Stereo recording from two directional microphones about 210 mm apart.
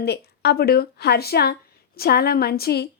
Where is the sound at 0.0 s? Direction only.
50° left (ahead or behind).